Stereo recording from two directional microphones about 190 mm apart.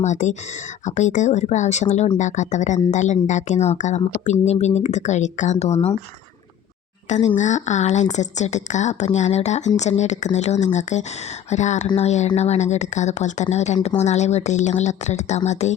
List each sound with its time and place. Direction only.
0.0 s speech: 40° left (ahead or behind)
7.1 s speech: 40° left (ahead or behind)